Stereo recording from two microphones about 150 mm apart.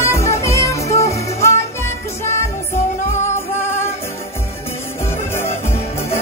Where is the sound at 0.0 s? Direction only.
20° left (ahead or behind).